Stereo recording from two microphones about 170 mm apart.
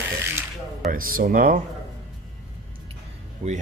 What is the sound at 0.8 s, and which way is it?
Speech, 55° right (ahead or behind).